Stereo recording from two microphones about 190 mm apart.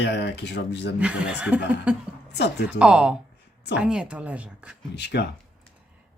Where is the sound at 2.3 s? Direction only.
60° left (ahead or behind).